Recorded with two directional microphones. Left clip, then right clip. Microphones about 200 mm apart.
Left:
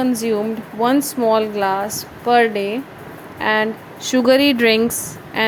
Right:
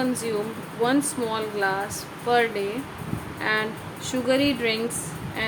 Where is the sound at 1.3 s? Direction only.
35° left (ahead or behind).